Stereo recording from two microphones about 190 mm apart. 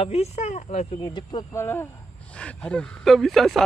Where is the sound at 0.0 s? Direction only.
35° left (ahead or behind).